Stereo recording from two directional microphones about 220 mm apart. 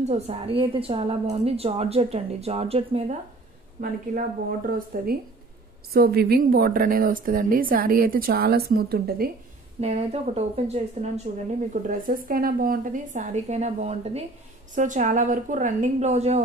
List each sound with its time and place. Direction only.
0.0 s a woman's voice: 30° right (ahead or behind)
3.8 s a woman's voice: 40° right (ahead or behind)
9.8 s a woman's voice: 30° right (ahead or behind)